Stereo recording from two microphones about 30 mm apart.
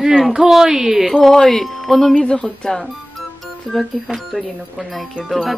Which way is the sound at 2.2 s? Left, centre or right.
Left.